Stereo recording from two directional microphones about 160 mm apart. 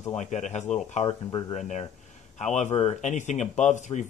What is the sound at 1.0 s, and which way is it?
Speech, 35° left (ahead or behind).